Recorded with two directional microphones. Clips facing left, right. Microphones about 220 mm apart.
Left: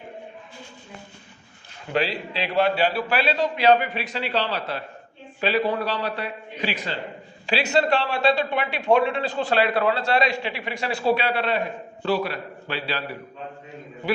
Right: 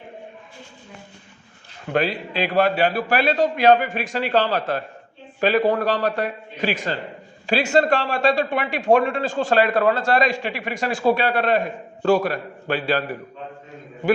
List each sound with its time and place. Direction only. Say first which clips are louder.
1.9 s a man's voice: right 3 dB; 50° right (ahead or behind)